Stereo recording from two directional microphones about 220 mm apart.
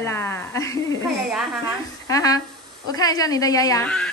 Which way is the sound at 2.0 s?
15° left (ahead or behind).